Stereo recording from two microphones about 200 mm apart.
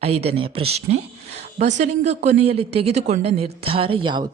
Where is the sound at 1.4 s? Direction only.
35° right (ahead or behind).